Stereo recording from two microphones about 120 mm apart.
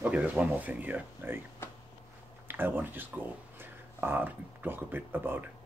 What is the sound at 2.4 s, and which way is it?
Speech, 15° right (ahead or behind).